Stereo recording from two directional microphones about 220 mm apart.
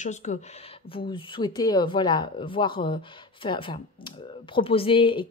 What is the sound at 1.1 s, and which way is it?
Speech, 20° left (ahead or behind).